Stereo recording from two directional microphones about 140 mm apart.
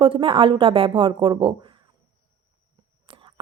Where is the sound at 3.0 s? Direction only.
35° right (ahead or behind).